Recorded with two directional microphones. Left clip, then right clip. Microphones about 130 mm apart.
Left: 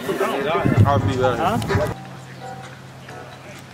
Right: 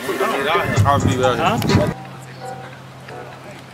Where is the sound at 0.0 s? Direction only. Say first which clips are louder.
Right 2 dB; 30° right (ahead or behind).